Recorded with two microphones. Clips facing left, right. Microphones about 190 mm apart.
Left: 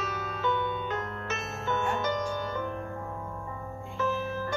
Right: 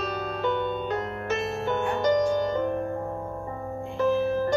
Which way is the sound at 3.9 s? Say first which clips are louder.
Right 8 dB; 15° right (ahead or behind).